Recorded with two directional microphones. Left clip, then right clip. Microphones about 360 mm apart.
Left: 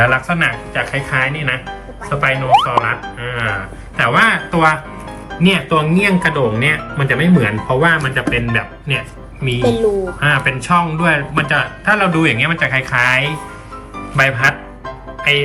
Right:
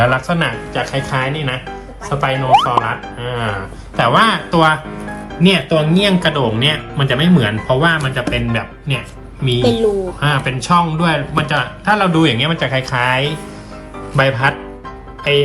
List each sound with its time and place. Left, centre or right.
0.0 s speech: centre